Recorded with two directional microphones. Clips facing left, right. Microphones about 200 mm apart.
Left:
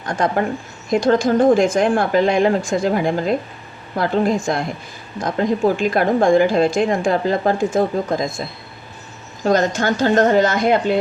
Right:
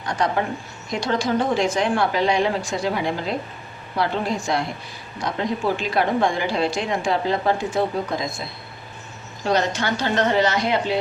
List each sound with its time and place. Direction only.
0.0 s a woman's voice: 50° left (ahead or behind)